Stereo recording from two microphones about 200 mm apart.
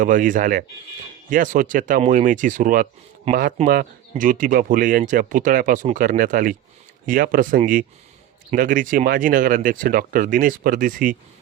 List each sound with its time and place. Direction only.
0.0 s speech: 40° right (ahead or behind)